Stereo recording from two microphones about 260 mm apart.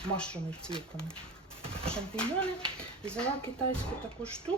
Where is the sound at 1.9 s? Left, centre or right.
Centre.